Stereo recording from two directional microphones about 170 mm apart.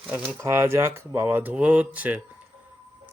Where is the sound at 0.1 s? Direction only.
15° right (ahead or behind).